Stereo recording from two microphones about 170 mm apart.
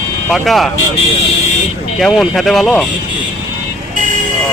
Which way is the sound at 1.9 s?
Centre (ahead or behind).